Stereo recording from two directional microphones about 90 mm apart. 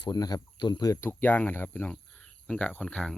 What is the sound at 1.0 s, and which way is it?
Speech, 25° left (ahead or behind).